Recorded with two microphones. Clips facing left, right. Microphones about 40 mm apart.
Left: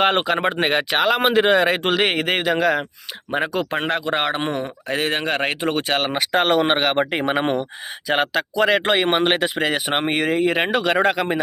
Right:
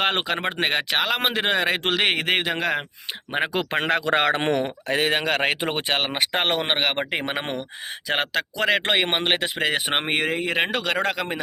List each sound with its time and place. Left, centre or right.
0.0 s speech: centre
3.5 s speech: right
3.8 s speech: right
4.6 s speech: right
5.9 s speech: centre
7.1 s speech: centre